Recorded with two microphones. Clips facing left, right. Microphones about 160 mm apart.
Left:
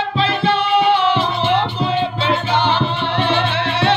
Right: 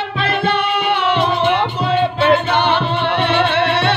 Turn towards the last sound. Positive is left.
turn(degrees=-60)  # may be behind; listen again after turning